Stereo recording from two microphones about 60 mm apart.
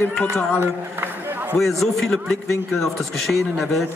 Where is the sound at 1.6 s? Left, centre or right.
Centre.